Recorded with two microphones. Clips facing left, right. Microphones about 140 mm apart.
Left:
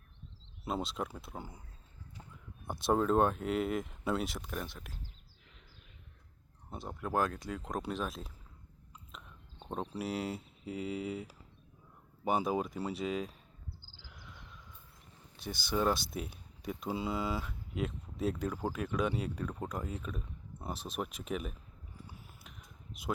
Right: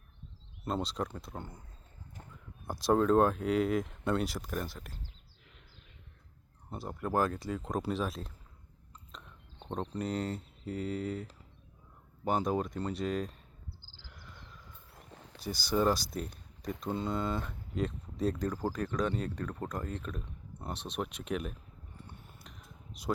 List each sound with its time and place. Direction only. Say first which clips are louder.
0.6 s speech: right 2 dB; 5° left (ahead or behind)
2.6 s speech: right 3 dB; centre (ahead or behind)
6.7 s speech: right 3 dB; centre (ahead or behind)
14.0 s a sound: right 1 dB; centre (ahead or behind)
14.9 s wild animals: right 7 dB; 80° right
15.4 s speech: right 3 dB; centre (ahead or behind)
21.9 s a sound: even; 5° left (ahead or behind)